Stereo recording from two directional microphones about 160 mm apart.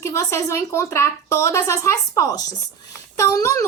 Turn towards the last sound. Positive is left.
turn(degrees=20)  # may be behind; listen again after turning